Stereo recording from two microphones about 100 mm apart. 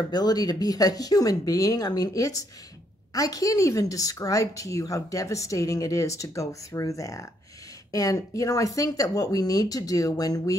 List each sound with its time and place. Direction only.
0.1 s a woman's voice: 40° left (ahead or behind)